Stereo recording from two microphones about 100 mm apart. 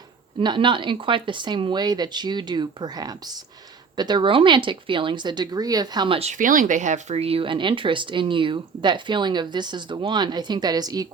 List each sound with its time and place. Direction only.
0.3 s speech: 55° right (ahead or behind)
6.1 s speech: 85° right; by 11.1 s 40° right (ahead or behind)